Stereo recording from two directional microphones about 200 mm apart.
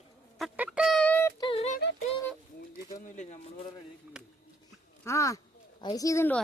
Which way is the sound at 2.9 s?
40° left (ahead or behind).